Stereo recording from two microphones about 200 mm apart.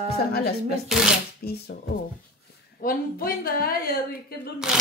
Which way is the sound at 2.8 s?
45° left (ahead or behind).